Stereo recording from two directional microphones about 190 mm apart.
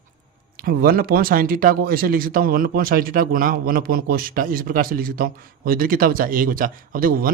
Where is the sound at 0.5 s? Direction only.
55° right (ahead or behind).